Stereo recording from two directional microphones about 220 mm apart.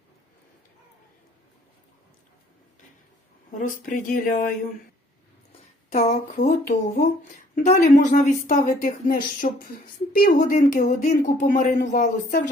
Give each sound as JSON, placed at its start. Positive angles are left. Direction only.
{"t": 3.6, "sound": "a woman's voice", "side_deg": 35}
{"t": 6.1, "sound": "a woman's voice", "side_deg": 30}